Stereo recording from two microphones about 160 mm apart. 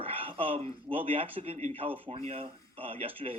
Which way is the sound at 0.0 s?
35° right (ahead or behind).